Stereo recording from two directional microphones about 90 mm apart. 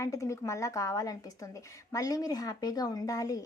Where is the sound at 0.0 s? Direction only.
35° left (ahead or behind).